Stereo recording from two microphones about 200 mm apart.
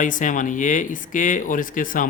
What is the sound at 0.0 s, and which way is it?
A man's voice, 40° left (ahead or behind).